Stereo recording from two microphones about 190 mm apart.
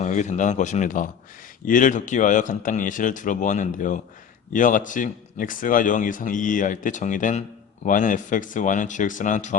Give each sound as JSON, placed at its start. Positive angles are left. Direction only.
{"t": 0.0, "sound": "speech", "side_deg": 40}